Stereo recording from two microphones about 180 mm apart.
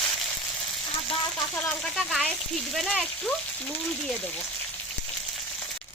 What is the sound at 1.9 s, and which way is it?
Speech, centre (ahead or behind).